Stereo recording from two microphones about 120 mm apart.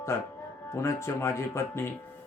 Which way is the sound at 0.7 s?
25° left (ahead or behind).